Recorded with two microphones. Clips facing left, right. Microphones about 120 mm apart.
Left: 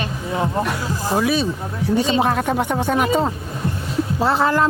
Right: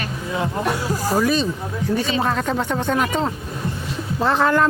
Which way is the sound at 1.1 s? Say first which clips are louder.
Left 1 dB; 5° left (ahead or behind).